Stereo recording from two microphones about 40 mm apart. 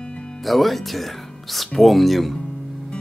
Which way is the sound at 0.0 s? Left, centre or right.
Left.